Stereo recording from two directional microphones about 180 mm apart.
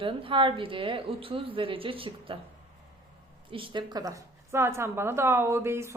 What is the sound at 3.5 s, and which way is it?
A woman's voice, 25° right (ahead or behind).